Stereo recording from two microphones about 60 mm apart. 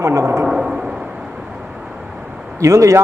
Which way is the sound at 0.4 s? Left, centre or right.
Centre.